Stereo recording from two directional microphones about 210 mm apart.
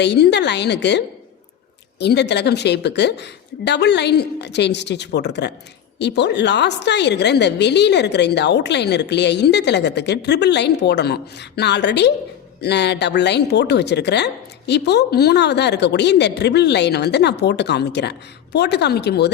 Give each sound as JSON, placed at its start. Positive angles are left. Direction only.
{"t": 0.0, "sound": "a woman's voice", "side_deg": 55}